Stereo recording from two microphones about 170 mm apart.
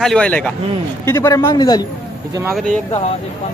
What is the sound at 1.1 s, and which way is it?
Speech, 20° left (ahead or behind).